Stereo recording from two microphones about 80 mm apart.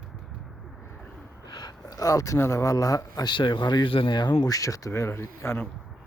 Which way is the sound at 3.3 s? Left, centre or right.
Left.